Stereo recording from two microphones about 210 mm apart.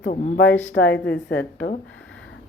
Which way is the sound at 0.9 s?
55° left (ahead or behind).